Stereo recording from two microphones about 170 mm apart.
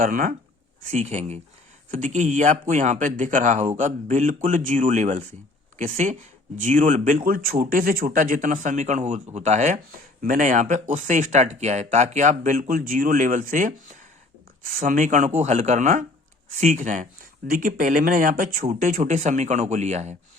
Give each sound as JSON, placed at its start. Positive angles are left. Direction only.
{"t": 0.0, "sound": "speech", "side_deg": -55}